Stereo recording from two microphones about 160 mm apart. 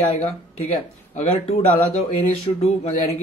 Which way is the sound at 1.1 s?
40° left (ahead or behind).